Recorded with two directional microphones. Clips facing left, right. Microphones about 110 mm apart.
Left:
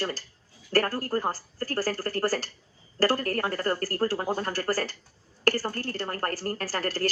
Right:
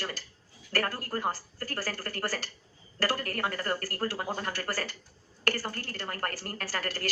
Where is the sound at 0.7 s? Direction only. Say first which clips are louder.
Left 6 dB; 35° left (ahead or behind).